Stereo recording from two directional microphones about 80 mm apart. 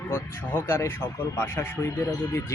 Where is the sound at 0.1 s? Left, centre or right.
Left.